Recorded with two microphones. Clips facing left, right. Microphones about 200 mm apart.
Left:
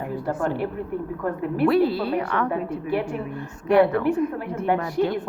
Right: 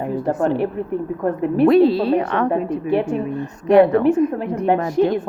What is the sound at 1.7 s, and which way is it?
A woman's voice, 25° right (ahead or behind).